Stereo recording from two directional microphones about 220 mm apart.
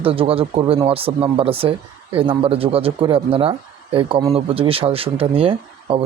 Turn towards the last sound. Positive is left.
turn(degrees=-25)  # may be behind; listen again after turning